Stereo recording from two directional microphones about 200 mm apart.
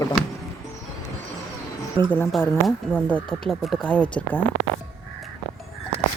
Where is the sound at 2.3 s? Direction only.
Centre (ahead or behind).